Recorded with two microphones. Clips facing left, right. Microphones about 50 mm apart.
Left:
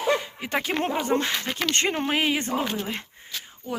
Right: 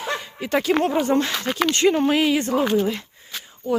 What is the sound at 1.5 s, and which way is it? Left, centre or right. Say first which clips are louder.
Speech: right 6 dB; centre.